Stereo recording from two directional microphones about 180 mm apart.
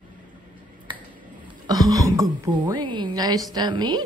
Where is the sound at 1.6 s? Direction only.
20° right (ahead or behind).